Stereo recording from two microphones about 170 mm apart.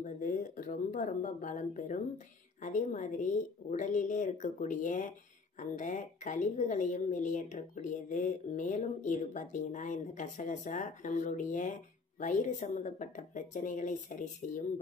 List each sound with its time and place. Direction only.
0.0 s a woman's voice: 50° left (ahead or behind)